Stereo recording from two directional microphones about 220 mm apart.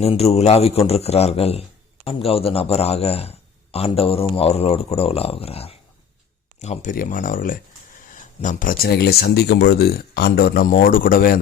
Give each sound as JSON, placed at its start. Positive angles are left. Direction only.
{"t": 0.0, "sound": "a man's voice", "side_deg": 30}